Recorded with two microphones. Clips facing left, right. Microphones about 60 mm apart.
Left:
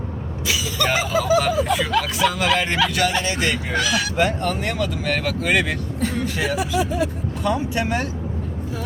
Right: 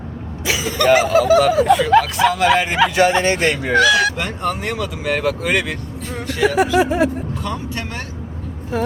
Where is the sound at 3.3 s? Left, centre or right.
Right.